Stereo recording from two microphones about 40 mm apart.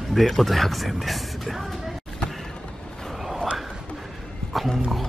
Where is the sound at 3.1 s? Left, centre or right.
Centre.